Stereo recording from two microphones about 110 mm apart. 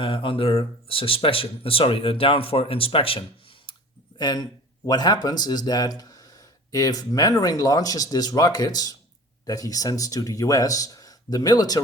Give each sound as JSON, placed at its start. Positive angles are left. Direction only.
{"t": 0.0, "sound": "speech", "side_deg": 50}
{"t": 3.7, "sound": "clicking", "side_deg": 50}
{"t": 4.2, "sound": "speech", "side_deg": 40}